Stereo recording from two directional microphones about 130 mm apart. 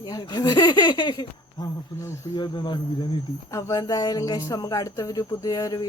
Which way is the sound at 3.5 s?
25° left (ahead or behind).